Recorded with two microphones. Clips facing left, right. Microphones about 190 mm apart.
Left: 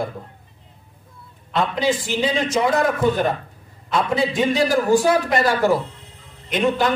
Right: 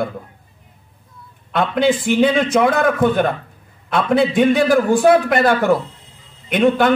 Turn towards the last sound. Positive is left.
turn(degrees=-55)  # may be behind; listen again after turning